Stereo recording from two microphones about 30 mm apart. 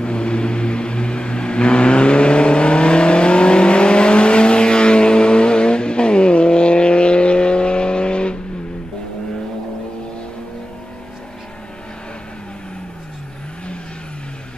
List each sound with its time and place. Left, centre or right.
0.0 s vehicle: left